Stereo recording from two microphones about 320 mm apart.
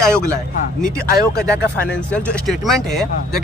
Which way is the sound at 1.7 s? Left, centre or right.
Centre.